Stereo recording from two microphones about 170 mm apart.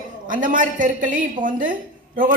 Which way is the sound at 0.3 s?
50° right (ahead or behind).